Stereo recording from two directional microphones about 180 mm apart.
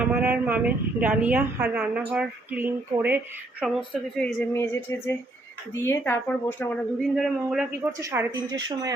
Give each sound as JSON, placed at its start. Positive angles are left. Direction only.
{"t": 0.0, "sound": "speech", "side_deg": -10}
{"t": 3.6, "sound": "speech", "side_deg": 0}
{"t": 7.9, "sound": "speech", "side_deg": -15}